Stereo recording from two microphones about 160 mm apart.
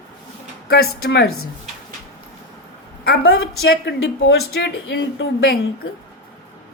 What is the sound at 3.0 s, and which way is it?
Speech, 85° left.